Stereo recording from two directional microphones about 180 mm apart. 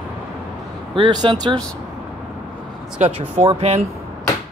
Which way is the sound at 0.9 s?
25° right (ahead or behind).